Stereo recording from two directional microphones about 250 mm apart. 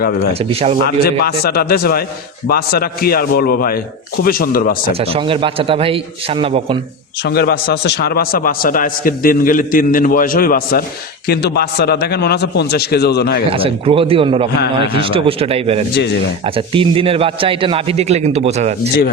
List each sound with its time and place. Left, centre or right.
0.0 s a man's voice: left
0.3 s a man's voice: right
1.0 s a man's voice: left
4.9 s a man's voice: right
7.3 s a man's voice: left
13.5 s a man's voice: right